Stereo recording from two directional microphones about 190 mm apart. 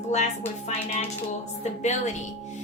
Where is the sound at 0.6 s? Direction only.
35° left (ahead or behind).